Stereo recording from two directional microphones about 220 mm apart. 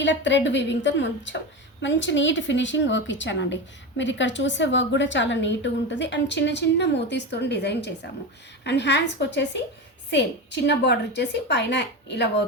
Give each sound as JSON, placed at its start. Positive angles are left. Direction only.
{"t": 0.0, "sound": "a woman's voice", "side_deg": 55}